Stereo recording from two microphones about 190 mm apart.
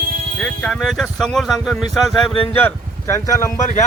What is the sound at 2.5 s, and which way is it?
Speech, 15° left (ahead or behind).